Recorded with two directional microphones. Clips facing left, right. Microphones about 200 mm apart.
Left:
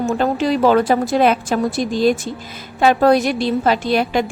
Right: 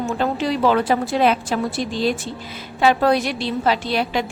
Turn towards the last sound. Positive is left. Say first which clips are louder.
# left 4 dB
turn(degrees=50)  # may be behind; listen again after turning